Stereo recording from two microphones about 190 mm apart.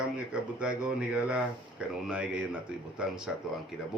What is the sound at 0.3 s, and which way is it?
Speech, 5° right (ahead or behind).